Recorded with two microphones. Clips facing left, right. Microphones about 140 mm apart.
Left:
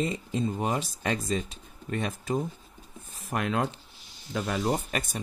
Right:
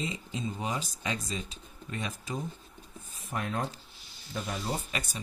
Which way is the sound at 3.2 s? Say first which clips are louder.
Left 5 dB; 80° left.